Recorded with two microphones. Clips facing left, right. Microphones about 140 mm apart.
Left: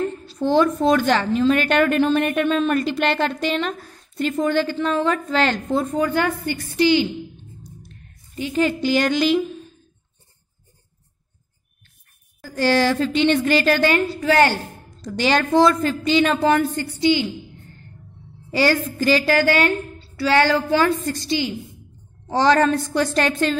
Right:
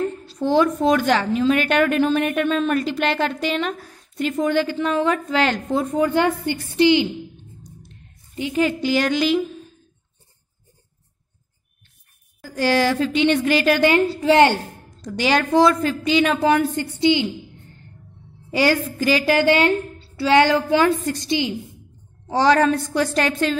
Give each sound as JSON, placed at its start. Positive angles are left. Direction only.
{"t": 0.0, "sound": "speech", "side_deg": -10}
{"t": 7.6, "sound": "a sound", "side_deg": -20}
{"t": 8.5, "sound": "a woman's voice", "side_deg": -5}
{"t": 12.4, "sound": "speech", "side_deg": -10}
{"t": 16.7, "sound": "a woman's voice", "side_deg": -20}
{"t": 18.5, "sound": "speech", "side_deg": -15}
{"t": 22.3, "sound": "a woman's voice", "side_deg": -10}